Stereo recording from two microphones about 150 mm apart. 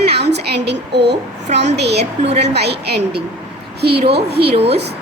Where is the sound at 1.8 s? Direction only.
90° right.